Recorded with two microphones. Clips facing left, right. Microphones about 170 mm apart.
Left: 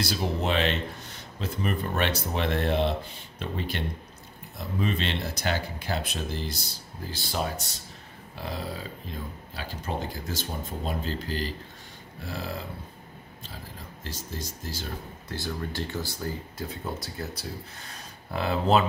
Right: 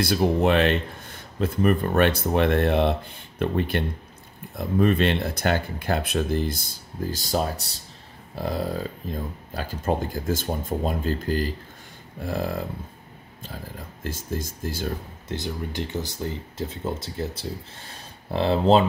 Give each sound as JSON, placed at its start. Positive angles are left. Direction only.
{"t": 0.0, "sound": "speech", "side_deg": -55}
{"t": 8.4, "sound": "speech", "side_deg": -45}
{"t": 14.0, "sound": "speech", "side_deg": -50}
{"t": 15.2, "sound": "speech", "side_deg": -20}